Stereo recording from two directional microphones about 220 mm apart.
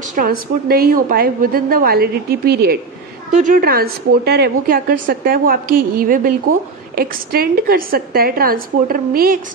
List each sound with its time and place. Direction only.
0.1 s a woman's voice: 40° right (ahead or behind)
3.3 s a woman's voice: 35° right (ahead or behind)